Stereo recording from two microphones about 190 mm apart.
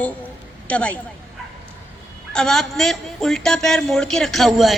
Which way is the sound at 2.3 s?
Centre (ahead or behind).